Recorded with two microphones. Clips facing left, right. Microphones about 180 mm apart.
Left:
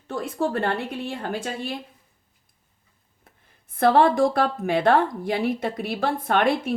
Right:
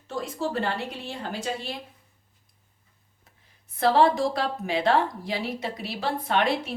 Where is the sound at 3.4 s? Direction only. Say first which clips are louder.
Left 4 dB; 55° left (ahead or behind).